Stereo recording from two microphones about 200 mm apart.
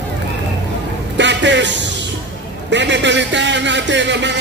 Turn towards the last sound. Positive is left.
turn(degrees=-60)  # may be behind; listen again after turning